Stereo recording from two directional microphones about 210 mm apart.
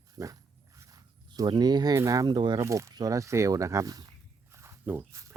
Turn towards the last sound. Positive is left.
turn(degrees=-15)  # may be behind; listen again after turning